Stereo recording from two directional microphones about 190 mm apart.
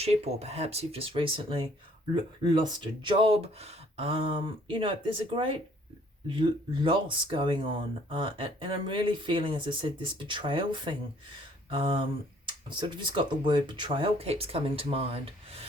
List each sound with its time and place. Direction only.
0.0 s speech: 35° right (ahead or behind)
6.8 s speech: 25° right (ahead or behind)